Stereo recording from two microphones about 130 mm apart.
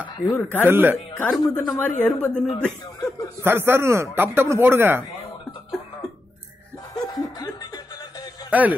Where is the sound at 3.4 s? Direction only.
15° right (ahead or behind).